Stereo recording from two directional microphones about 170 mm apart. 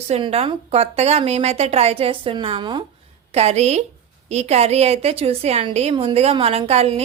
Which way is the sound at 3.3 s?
40° right (ahead or behind).